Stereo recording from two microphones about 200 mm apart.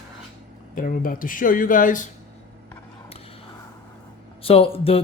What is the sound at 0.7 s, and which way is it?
Speech, 45° left (ahead or behind).